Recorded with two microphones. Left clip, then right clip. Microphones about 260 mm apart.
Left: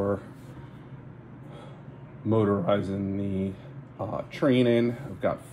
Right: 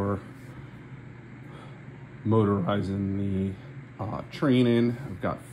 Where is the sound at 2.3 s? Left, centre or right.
Right.